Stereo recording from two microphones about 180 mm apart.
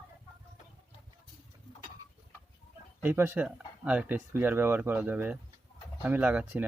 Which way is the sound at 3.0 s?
10° right (ahead or behind).